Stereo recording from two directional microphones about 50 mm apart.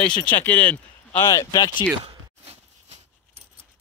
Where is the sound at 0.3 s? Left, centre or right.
Left.